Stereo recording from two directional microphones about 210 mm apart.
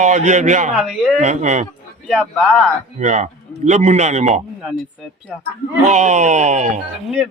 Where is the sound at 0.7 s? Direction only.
Centre (ahead or behind).